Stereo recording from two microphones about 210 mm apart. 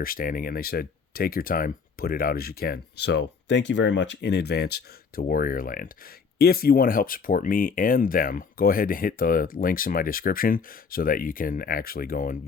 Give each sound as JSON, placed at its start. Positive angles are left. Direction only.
{"t": 0.0, "sound": "speech", "side_deg": 45}